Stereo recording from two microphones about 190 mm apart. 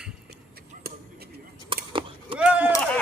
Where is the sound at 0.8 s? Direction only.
55° right (ahead or behind).